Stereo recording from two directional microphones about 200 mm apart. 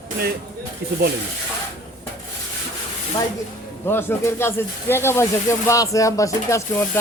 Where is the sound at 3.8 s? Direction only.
10° left (ahead or behind).